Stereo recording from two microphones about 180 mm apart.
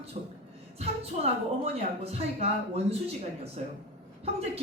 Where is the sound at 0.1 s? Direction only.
40° right (ahead or behind).